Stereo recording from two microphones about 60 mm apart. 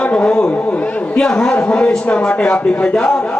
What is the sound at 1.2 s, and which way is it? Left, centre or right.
A man's voice, centre.